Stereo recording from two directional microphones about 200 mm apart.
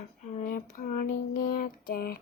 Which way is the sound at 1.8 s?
50° left (ahead or behind).